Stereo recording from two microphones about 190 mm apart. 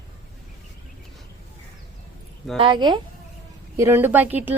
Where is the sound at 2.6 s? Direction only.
25° right (ahead or behind).